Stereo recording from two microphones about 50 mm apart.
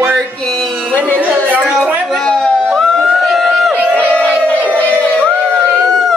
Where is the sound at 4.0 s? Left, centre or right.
Left.